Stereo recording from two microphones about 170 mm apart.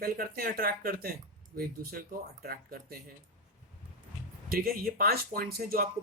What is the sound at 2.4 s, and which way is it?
Speech, 65° right (ahead or behind).